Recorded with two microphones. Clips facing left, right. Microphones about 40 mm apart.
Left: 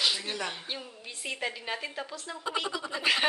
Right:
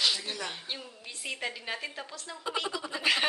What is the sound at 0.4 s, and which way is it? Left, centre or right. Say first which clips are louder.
Speech: left 2 dB; centre.